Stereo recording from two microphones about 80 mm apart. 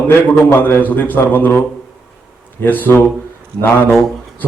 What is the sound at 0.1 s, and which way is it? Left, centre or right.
A man's voice, left.